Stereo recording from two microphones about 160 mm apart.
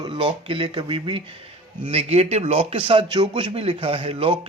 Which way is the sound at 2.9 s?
30° right (ahead or behind).